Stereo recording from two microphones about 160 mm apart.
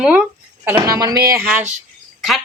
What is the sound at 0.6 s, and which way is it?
Speech, 20° right (ahead or behind).